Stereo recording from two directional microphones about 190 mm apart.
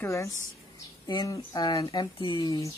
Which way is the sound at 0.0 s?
15° left (ahead or behind).